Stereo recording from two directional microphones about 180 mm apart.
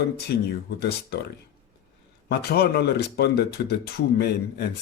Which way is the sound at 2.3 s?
60° left (ahead or behind).